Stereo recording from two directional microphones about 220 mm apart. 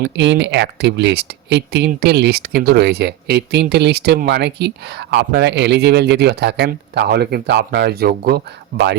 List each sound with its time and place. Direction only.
0.0 s speech: 55° right (ahead or behind)